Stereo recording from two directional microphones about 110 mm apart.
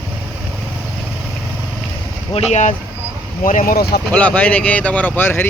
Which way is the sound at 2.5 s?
90° left.